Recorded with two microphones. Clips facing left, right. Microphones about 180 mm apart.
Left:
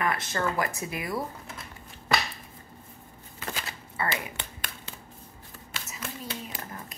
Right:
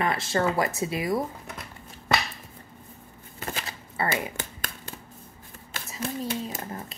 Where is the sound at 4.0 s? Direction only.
30° right (ahead or behind).